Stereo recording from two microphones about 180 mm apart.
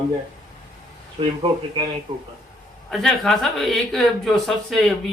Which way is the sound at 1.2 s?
35° right (ahead or behind).